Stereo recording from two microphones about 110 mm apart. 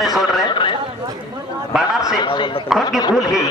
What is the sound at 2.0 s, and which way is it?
Speech, 45° left (ahead or behind).